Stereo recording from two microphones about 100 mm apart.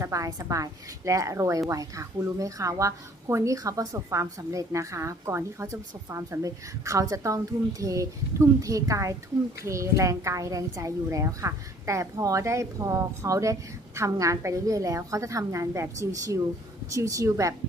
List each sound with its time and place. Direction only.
0.0 s a woman's voice: 35° right (ahead or behind)